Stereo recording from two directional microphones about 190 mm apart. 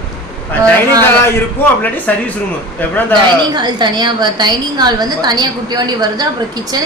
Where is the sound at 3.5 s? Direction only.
20° right (ahead or behind).